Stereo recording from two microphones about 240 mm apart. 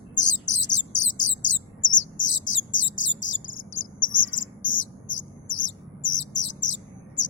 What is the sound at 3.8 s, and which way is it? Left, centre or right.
Cricket, left.